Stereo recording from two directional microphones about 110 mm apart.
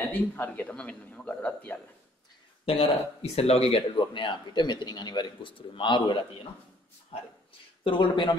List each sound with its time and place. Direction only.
0.1 s speech: 15° left (ahead or behind)
2.6 s speech: 65° left (ahead or behind)
3.9 s a man's voice: 45° left (ahead or behind)
7.8 s a man's voice: 50° left (ahead or behind)